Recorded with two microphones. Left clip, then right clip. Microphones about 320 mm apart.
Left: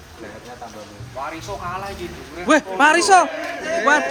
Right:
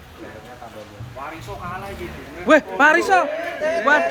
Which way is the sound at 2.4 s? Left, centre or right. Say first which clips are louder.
Right 1 dB; centre.